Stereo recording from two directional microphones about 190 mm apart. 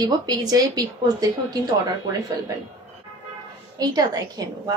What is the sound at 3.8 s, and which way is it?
Speech, 20° right (ahead or behind).